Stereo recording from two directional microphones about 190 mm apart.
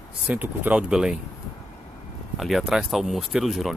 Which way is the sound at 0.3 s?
5° right (ahead or behind).